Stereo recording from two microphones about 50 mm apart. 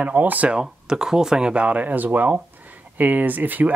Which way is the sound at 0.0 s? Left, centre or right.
Right.